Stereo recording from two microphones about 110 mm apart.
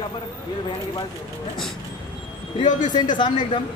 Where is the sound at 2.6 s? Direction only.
40° left (ahead or behind).